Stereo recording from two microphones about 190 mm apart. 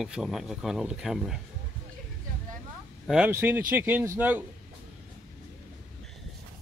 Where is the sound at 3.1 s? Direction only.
10° right (ahead or behind).